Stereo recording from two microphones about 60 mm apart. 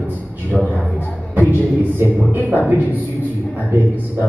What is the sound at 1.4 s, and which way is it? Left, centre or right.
A man's voice, right.